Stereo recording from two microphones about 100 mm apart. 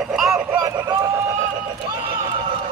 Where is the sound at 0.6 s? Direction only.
30° right (ahead or behind).